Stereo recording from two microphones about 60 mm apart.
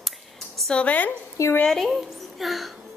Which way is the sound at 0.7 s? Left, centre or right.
Left.